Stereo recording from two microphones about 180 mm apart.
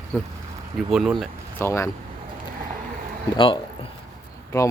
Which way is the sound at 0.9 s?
Centre (ahead or behind).